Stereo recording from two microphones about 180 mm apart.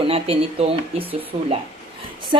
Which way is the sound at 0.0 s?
30° right (ahead or behind).